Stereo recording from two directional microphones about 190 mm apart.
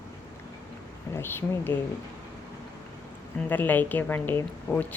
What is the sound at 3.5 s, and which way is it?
A woman's voice, 10° left (ahead or behind).